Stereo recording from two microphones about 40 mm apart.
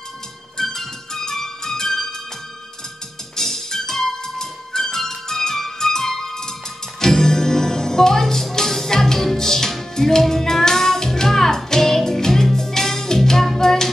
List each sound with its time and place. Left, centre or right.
0.6 s music: centre
3.3 s music: centre